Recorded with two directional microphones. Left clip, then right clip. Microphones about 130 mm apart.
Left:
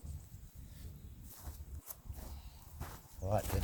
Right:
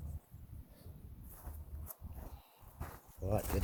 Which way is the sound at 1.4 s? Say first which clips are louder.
Even; 10° right (ahead or behind).